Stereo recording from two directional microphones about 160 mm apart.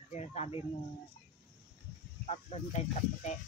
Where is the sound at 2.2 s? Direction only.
45° left (ahead or behind).